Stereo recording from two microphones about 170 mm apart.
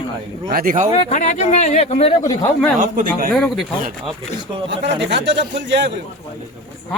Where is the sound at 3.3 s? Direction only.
5° left (ahead or behind).